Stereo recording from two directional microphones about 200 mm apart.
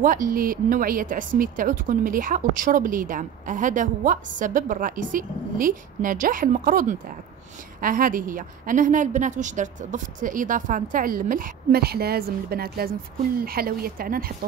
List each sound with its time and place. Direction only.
0.0 s speech: 45° right (ahead or behind)